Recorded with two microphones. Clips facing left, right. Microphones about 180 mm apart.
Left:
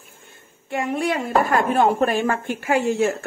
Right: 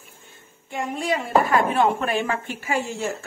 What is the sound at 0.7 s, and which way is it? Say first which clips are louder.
Speech: left 3 dB; 65° left (ahead or behind).